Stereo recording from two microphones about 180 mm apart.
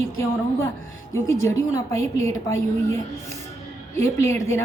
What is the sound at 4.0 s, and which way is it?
Speech, 15° left (ahead or behind).